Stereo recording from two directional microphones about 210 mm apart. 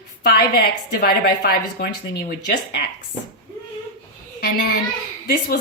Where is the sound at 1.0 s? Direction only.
45° left (ahead or behind).